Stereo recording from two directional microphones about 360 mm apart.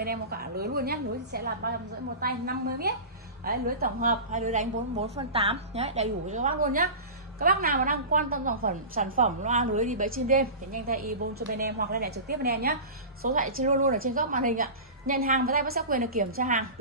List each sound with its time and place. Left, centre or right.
0.0 s a woman's voice: right